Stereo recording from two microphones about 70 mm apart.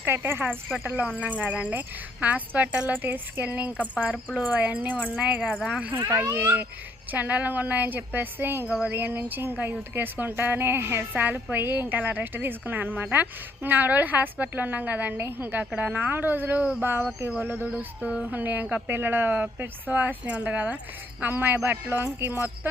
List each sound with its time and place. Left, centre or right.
0.0 s speech: right
0.9 s speech: right
5.6 s speech: centre
6.4 s speech: right